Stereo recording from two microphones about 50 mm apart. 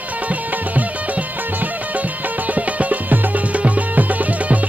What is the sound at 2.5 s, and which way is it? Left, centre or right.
Music, right.